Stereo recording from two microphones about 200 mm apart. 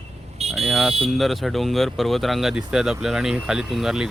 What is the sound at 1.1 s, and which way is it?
Speech, centre (ahead or behind).